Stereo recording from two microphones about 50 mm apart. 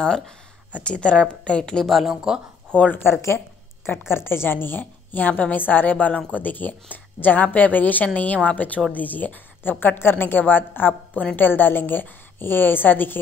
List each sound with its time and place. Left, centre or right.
0.8 s a woman's voice: left
2.0 s speech: centre
2.7 s speech: centre
4.1 s a woman's voice: left